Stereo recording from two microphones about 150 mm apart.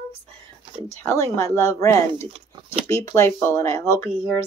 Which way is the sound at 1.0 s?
20° left (ahead or behind).